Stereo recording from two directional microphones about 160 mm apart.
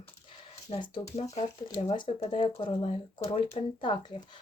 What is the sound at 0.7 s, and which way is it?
Speech, 35° left (ahead or behind).